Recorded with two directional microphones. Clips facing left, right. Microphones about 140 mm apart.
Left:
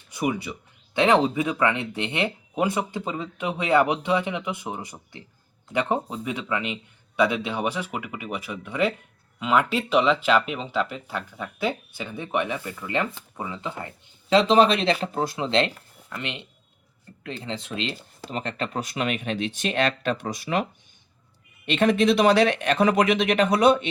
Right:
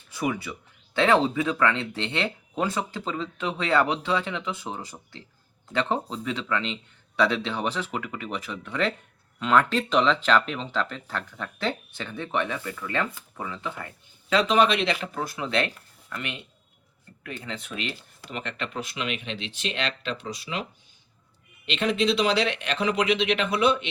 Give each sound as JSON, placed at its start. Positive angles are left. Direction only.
{"t": 0.1, "sound": "speech", "side_deg": 15}
{"t": 21.7, "sound": "speech", "side_deg": 50}